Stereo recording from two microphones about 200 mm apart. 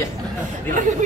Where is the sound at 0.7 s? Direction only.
40° right (ahead or behind).